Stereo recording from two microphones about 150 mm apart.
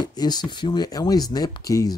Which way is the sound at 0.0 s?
25° left (ahead or behind).